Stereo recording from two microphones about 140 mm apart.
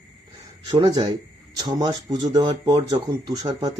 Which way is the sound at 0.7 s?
35° right (ahead or behind).